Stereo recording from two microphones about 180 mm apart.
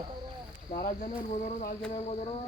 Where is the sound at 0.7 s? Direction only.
45° left (ahead or behind).